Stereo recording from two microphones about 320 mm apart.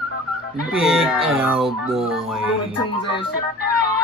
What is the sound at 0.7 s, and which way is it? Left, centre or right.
Speech, centre.